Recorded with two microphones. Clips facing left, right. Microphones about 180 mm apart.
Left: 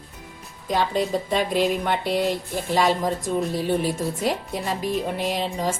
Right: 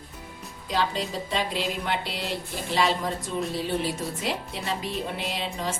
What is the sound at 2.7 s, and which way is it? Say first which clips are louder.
Speech: left 4 dB; 45° left (ahead or behind).